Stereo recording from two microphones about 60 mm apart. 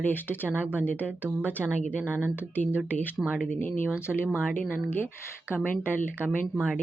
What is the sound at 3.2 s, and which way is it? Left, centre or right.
Speech, centre.